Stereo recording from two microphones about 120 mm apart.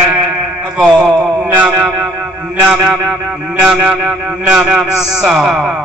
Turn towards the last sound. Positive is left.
turn(degrees=-5)  # may be behind; listen again after turning